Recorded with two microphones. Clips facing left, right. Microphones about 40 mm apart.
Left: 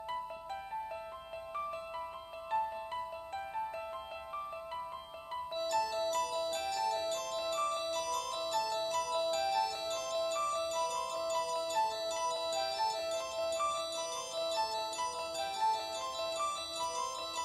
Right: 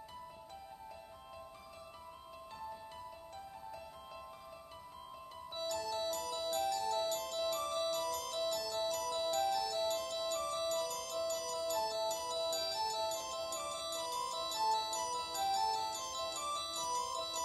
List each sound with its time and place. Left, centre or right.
5.7 s music: left